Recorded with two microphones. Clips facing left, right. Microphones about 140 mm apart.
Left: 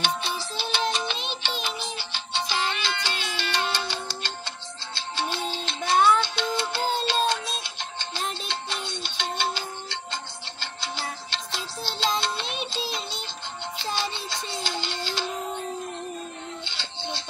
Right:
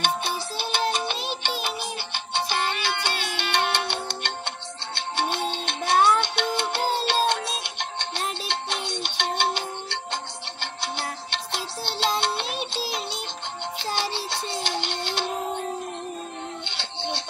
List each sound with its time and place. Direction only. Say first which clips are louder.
0.0 s music: right 2 dB; 50° right (ahead or behind)
13.9 s music: right 3 dB; 65° right (ahead or behind)
16.6 s music: right 3 dB; 65° right (ahead or behind)